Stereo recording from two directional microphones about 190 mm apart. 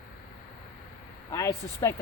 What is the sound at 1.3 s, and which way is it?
Speech, 15° left (ahead or behind).